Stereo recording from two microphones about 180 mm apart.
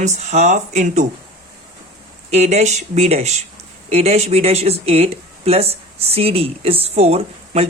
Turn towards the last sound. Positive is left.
turn(degrees=-35)  # may be behind; listen again after turning